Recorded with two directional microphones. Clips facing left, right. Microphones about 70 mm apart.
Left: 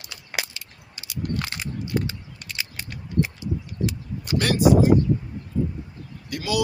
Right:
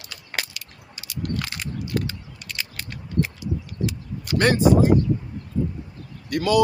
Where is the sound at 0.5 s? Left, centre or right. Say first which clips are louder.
Right 1 dB; left.